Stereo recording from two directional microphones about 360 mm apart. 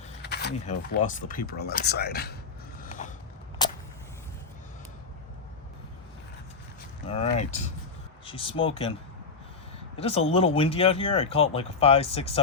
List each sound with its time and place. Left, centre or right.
0.2 s speech: left
2.8 s a sound: left
3.6 s vehicle: centre
7.3 s speech: centre
10.0 s speech: centre